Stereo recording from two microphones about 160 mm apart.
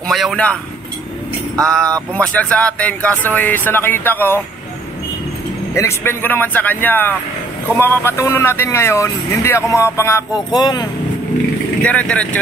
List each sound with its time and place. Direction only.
0.0 s speech: centre (ahead or behind)
1.6 s speech: 5° left (ahead or behind)
5.8 s speech: 15° left (ahead or behind)
11.8 s speech: 10° left (ahead or behind)